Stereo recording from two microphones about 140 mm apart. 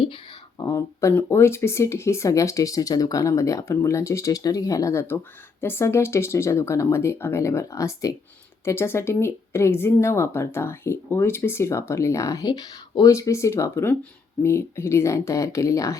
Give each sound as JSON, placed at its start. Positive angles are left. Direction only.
{"t": 0.6, "sound": "speech", "side_deg": 20}